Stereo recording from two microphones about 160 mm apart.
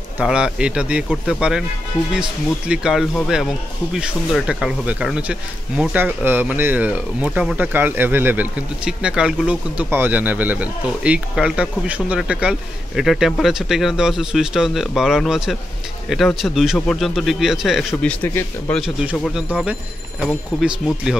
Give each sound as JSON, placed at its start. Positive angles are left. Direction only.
{"t": 0.2, "sound": "a man's voice", "side_deg": -5}
{"t": 2.7, "sound": "a man's voice", "side_deg": -5}
{"t": 18.8, "sound": "a man's voice", "side_deg": -5}